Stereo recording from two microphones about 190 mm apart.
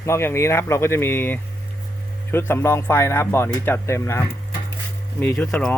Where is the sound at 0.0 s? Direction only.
15° left (ahead or behind).